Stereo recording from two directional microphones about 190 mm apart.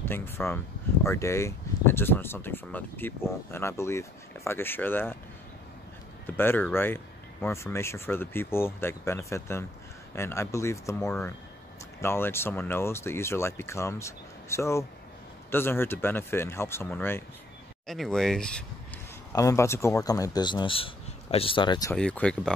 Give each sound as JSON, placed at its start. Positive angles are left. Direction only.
{"t": 0.1, "sound": "speech", "side_deg": 10}
{"t": 6.2, "sound": "speech", "side_deg": 10}
{"t": 19.3, "sound": "speech", "side_deg": 15}
{"t": 21.9, "sound": "speech", "side_deg": 5}